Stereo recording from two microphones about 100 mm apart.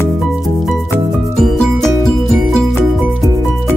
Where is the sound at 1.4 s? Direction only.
5° left (ahead or behind).